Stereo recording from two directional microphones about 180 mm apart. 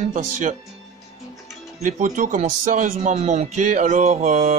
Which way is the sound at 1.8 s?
45° right (ahead or behind).